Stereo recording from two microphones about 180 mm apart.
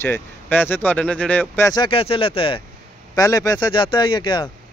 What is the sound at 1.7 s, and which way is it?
Speech, 30° left (ahead or behind).